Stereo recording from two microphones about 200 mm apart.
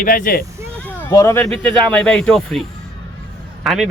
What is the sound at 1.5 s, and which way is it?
Speech, 5° left (ahead or behind).